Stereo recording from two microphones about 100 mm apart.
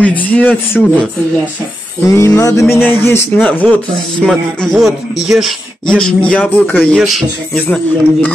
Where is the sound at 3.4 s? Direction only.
10° left (ahead or behind).